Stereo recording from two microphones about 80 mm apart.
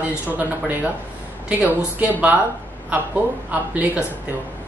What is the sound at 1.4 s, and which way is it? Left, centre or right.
Speech, centre.